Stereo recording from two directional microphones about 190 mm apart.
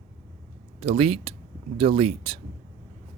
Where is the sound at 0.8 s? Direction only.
30° right (ahead or behind).